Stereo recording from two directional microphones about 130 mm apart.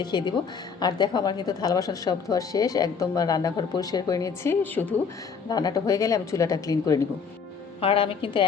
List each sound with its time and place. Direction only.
0.0 s a woman's voice: 35° left (ahead or behind); by 4.9 s 15° left (ahead or behind)
5.5 s speech: 30° left (ahead or behind)
7.8 s a woman's voice: 45° left (ahead or behind)